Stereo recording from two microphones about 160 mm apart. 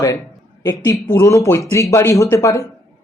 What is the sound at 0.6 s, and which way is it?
Speech, 25° left (ahead or behind).